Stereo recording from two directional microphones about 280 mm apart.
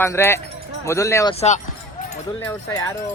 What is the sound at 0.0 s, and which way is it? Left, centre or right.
Speech, centre.